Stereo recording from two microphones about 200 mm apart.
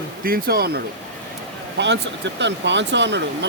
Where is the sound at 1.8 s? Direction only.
60° right (ahead or behind).